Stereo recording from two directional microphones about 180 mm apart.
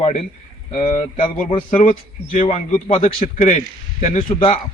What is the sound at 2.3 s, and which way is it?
A man's voice, 35° left (ahead or behind).